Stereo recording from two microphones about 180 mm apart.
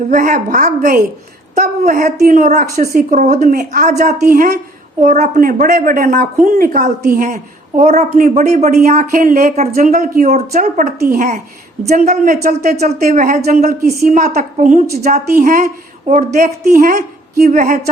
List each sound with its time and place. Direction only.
0.1 s a woman's voice: 50° right (ahead or behind)